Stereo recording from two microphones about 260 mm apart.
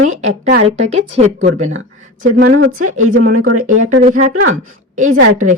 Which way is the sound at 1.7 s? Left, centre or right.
Right.